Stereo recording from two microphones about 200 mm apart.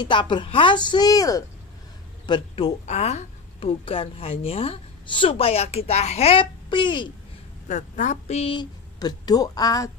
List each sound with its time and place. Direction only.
0.0 s a child's voice: 25° left (ahead or behind)
7.6 s speech: 40° left (ahead or behind); by 9.8 s 20° left (ahead or behind)